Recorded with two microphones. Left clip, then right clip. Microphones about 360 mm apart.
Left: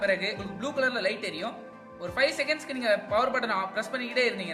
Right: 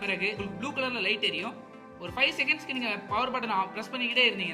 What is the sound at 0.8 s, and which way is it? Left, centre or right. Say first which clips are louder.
A woman's voice: left 1 dB; centre.